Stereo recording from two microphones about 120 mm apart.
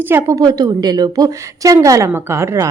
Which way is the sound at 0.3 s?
30° right (ahead or behind).